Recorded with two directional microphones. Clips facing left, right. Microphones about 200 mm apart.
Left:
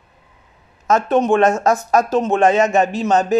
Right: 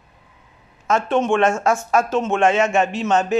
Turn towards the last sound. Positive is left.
turn(degrees=35)  # may be behind; listen again after turning